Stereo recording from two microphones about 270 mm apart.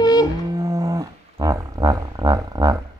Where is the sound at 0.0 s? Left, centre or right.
Centre.